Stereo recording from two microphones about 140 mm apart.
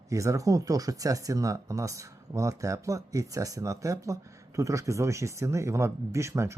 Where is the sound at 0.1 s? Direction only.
20° right (ahead or behind).